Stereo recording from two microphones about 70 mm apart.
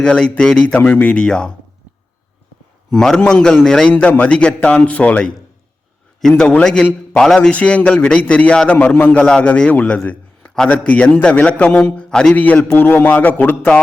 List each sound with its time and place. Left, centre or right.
0.0 s a man's voice: centre
0.8 s a man's voice: left
1.0 s a man's voice: centre
2.9 s a man's voice: centre
6.2 s a man's voice: centre
7.5 s a man's voice: centre